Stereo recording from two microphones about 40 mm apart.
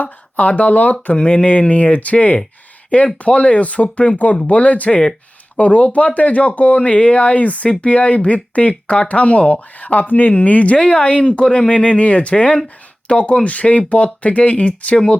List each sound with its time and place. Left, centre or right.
0.3 s speech: left
1.1 s speech: left
10.8 s speech: left